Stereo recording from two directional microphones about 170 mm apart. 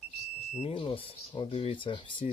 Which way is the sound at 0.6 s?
30° left (ahead or behind).